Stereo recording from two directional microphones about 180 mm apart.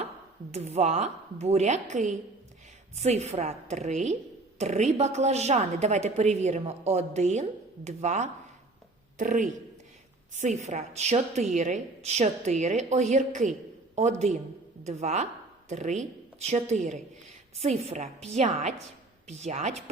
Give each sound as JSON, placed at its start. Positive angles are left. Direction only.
{"t": 0.5, "sound": "a woman's voice", "side_deg": -35}